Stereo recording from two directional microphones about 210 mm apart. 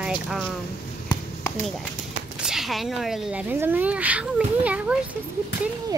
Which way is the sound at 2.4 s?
Centre (ahead or behind).